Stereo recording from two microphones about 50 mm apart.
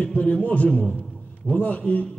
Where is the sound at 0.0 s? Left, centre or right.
Left.